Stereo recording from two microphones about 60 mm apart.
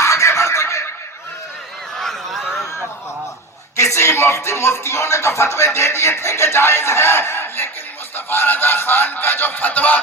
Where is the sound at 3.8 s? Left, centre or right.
Left.